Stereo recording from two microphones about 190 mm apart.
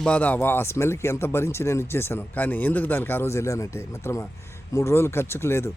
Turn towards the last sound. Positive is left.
turn(degrees=15)  # may be behind; listen again after turning